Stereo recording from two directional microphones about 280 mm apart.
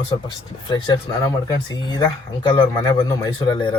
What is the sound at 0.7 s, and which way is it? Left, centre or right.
A man's voice, centre.